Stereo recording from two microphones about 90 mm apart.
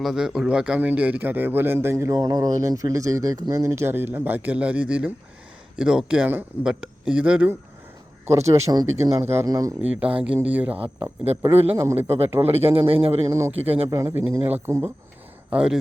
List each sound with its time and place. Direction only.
0.0 s speech: 5° right (ahead or behind); by 2.1 s 30° right (ahead or behind)
2.1 s speech: 45° right (ahead or behind)
3.5 s speech: 35° right (ahead or behind); by 6.2 s 10° right (ahead or behind)
6.2 s speech: 20° right (ahead or behind)
6.7 s speech: 10° right (ahead or behind)
8.3 s speech: 35° right (ahead or behind)
9.8 s speech: 15° right (ahead or behind)
12.4 s speech: 90° right
13.2 s speech: 30° right (ahead or behind)
15.4 s speech: 10° right (ahead or behind)